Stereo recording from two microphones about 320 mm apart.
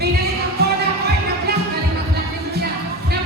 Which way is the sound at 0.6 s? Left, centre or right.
Right.